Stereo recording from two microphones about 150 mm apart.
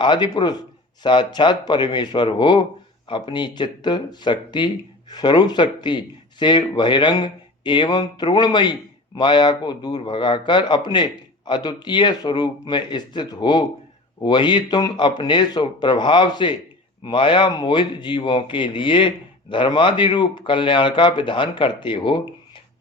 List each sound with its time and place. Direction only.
0.0 s speech: 30° left (ahead or behind)